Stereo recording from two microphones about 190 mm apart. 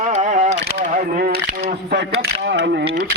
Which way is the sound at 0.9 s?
50° right (ahead or behind).